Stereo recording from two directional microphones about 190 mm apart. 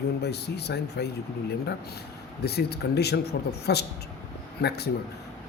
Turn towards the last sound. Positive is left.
turn(degrees=60)  # may be behind; listen again after turning